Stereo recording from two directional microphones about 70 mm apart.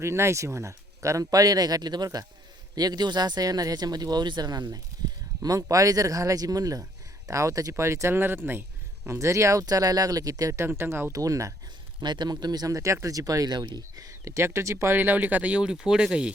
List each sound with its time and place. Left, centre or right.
0.0 s speech: right
5.4 s speech: right
9.0 s speech: right
10.5 s speech: right
11.1 s speech: right
11.9 s speech: right
14.8 s speech: right